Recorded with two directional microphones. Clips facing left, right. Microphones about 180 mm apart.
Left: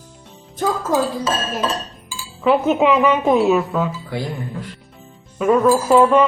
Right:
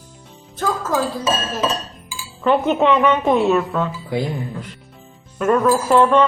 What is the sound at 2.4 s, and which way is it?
Speech, centre (ahead or behind).